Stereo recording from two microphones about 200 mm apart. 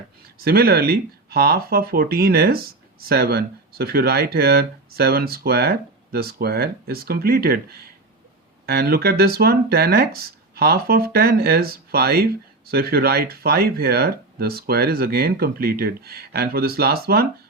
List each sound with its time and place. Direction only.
0.4 s speech: 50° right (ahead or behind)